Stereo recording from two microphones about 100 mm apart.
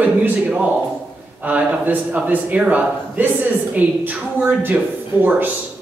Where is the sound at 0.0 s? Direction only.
15° right (ahead or behind).